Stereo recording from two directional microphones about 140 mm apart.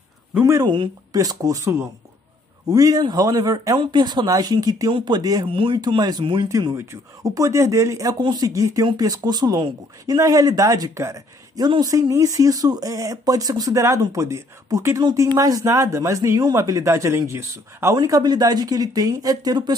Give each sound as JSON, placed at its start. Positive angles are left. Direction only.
{"t": 0.4, "sound": "speech", "side_deg": -20}
{"t": 6.7, "sound": "speech", "side_deg": -20}